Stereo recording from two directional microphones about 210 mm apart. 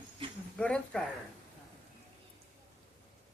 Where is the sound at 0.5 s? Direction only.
5° left (ahead or behind).